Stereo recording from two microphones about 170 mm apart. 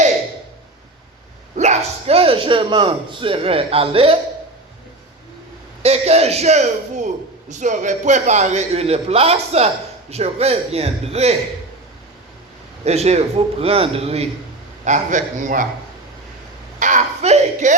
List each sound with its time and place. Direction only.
1.5 s speech: 40° right (ahead or behind)
5.8 s a man's voice: 35° right (ahead or behind)
12.8 s a man's voice: 40° right (ahead or behind)
16.8 s a man's voice: 45° right (ahead or behind)